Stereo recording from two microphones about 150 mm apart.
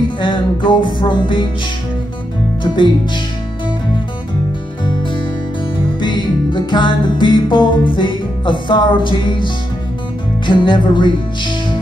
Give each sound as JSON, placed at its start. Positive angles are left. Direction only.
{"t": 0.2, "sound": "music", "side_deg": 30}
{"t": 2.6, "sound": "music", "side_deg": 30}
{"t": 5.9, "sound": "music", "side_deg": 30}